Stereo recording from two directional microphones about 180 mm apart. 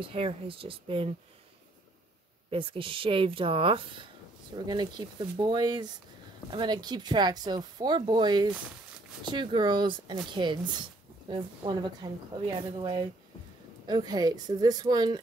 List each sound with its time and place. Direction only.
0.0 s speech: 30° right (ahead or behind)
2.5 s speech: 30° right (ahead or behind)